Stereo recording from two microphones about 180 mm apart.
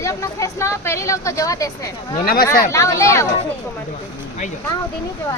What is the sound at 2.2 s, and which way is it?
Speech, 55° left (ahead or behind).